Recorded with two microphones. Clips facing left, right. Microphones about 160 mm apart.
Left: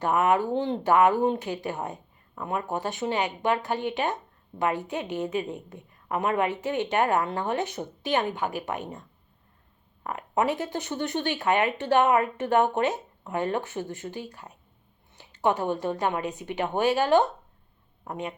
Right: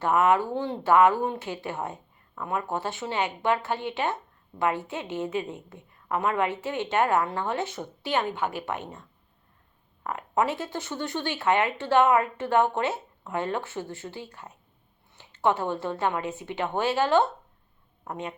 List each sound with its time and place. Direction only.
0.0 s speech: 15° left (ahead or behind)